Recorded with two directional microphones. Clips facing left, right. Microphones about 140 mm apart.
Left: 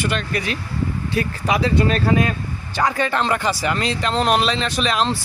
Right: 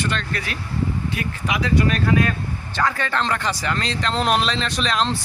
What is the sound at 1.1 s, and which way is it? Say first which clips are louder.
Speech: left 9 dB; 30° left (ahead or behind).